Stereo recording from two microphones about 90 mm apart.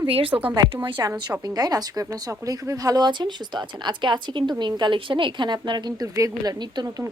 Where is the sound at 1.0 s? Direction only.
40° right (ahead or behind).